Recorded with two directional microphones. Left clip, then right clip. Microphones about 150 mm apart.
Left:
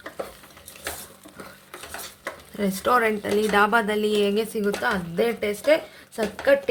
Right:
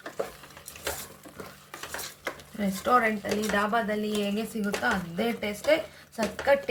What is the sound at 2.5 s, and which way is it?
A woman's voice, 75° left (ahead or behind).